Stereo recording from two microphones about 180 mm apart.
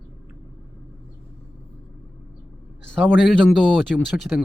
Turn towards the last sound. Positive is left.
turn(degrees=0)  # may be behind; listen again after turning